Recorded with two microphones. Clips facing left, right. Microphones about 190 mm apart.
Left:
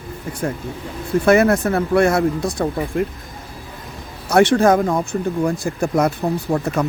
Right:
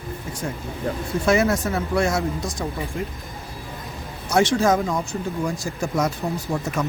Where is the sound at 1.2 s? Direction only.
60° left (ahead or behind).